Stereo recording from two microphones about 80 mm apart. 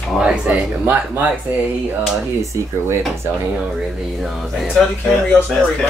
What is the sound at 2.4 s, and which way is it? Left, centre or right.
Speech, right.